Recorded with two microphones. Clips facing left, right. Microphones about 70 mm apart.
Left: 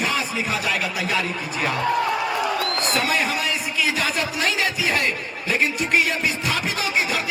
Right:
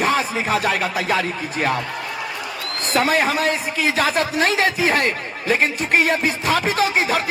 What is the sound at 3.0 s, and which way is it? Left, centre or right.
A man's voice, right.